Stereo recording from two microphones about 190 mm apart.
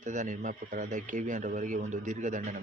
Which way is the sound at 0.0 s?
40° right (ahead or behind).